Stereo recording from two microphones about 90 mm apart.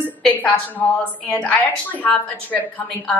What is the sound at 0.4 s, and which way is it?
A woman's voice, 20° left (ahead or behind).